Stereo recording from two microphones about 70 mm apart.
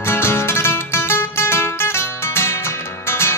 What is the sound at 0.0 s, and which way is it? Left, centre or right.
Music, left.